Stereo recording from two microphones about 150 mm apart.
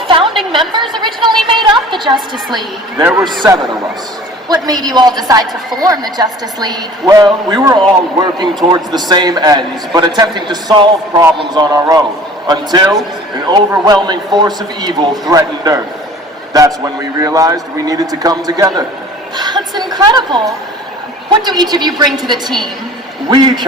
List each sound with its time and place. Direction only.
0.7 s a woman's voice: 30° right (ahead or behind)
1.5 s a sound: 30° right (ahead or behind)
3.0 s a man's voice: 15° right (ahead or behind)
4.4 s a woman's voice: 25° right (ahead or behind)